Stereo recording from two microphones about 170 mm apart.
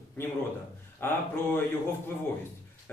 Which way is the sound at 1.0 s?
15° left (ahead or behind).